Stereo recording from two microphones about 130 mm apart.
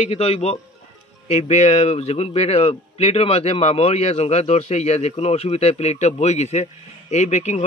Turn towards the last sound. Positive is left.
turn(degrees=65)  # may be behind; listen again after turning